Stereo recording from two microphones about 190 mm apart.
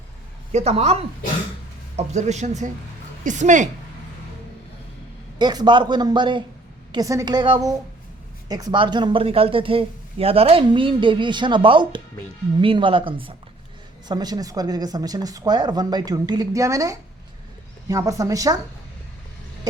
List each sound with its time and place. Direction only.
0.5 s speech: 35° right (ahead or behind)
2.0 s speech: 35° right (ahead or behind)
5.4 s speech: 20° right (ahead or behind)